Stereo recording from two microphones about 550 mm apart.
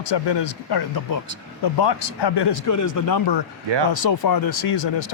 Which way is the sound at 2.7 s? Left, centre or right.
Left.